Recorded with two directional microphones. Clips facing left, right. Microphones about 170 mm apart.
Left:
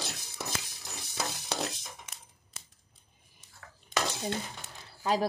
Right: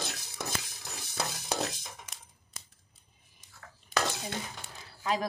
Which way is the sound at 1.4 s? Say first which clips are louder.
Right 1 dB; centre (ahead or behind).